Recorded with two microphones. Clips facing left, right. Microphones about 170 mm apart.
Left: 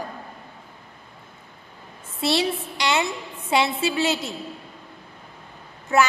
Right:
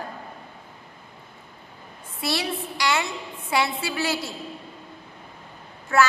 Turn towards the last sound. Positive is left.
turn(degrees=20)  # may be behind; listen again after turning